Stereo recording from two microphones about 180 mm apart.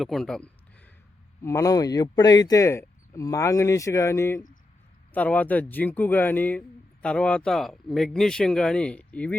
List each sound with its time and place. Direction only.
0.0 s speech: centre (ahead or behind)
1.4 s speech: 15° left (ahead or behind)